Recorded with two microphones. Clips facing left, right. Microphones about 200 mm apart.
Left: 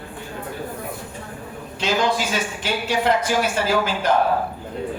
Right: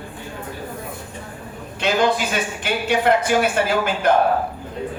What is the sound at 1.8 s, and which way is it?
Speech, 55° right (ahead or behind).